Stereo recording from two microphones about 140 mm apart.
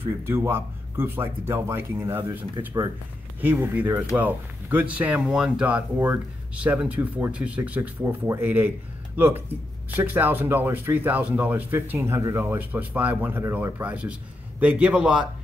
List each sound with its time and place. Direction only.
0.0 s speech: 15° right (ahead or behind)